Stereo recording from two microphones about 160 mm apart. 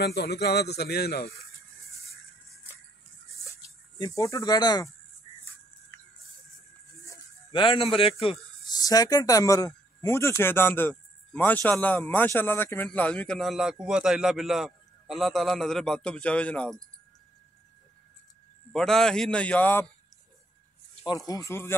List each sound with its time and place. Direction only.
0.0 s speech: 90° left
4.0 s speech: 20° left (ahead or behind)
7.5 s speech: 35° left (ahead or behind)
8.7 s speech: 25° left (ahead or behind); by 16.8 s 5° left (ahead or behind)
18.7 s a man's voice: 5° left (ahead or behind)
21.3 s speech: 20° left (ahead or behind)